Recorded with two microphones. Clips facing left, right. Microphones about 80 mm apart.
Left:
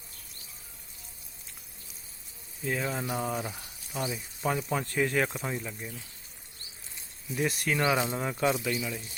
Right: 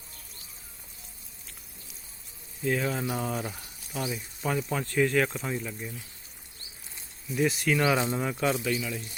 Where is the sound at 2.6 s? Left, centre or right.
Centre.